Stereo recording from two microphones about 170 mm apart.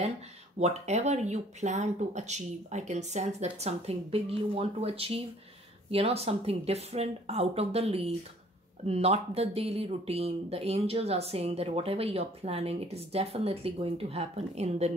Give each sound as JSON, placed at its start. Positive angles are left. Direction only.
{"t": 0.6, "sound": "speech", "side_deg": -40}